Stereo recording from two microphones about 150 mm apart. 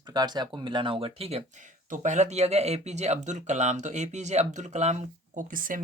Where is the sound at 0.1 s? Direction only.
25° right (ahead or behind).